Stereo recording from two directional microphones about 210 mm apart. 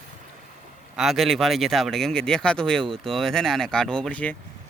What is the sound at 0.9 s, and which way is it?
Speech, centre (ahead or behind).